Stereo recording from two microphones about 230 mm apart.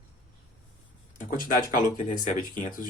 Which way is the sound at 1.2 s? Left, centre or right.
Left.